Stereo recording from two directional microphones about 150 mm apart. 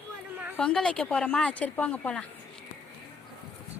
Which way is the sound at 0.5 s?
5° left (ahead or behind).